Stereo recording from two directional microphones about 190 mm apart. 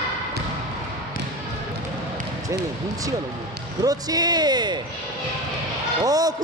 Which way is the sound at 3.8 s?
20° right (ahead or behind).